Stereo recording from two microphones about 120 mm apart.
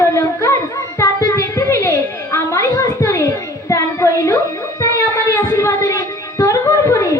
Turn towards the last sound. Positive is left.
turn(degrees=25)  # may be behind; listen again after turning